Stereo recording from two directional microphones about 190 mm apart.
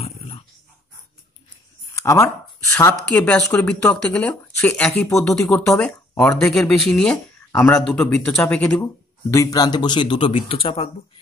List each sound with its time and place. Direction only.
2.0 s speech: 15° left (ahead or behind)
9.3 s speech: 15° left (ahead or behind)